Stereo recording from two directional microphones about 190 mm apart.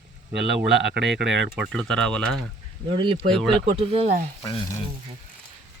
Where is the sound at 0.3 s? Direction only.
65° right (ahead or behind).